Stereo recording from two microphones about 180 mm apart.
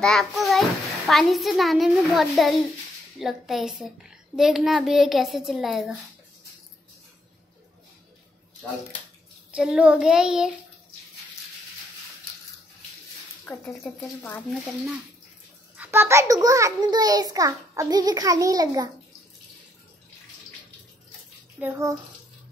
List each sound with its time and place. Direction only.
0.0 s a child's voice: centre (ahead or behind)
9.5 s a child's voice: 5° right (ahead or behind)
13.5 s speech: 10° left (ahead or behind)
15.7 s a child's voice: 10° right (ahead or behind)
21.5 s a child's voice: 10° right (ahead or behind)